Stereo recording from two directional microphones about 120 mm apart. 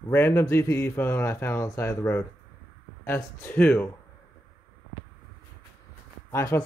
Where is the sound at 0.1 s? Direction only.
20° left (ahead or behind).